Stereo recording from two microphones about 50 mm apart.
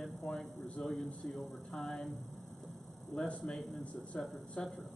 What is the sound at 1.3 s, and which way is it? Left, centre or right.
Speech, centre.